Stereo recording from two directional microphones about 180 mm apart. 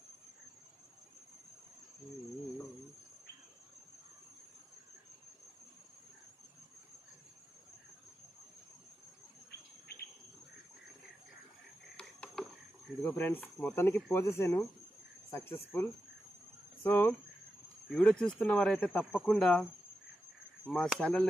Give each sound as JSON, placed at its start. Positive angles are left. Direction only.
{"t": 9.5, "sound": "insect", "side_deg": 60}
{"t": 11.9, "sound": "a sound", "side_deg": 5}
{"t": 13.0, "sound": "speech", "side_deg": 10}
{"t": 20.7, "sound": "speech", "side_deg": 5}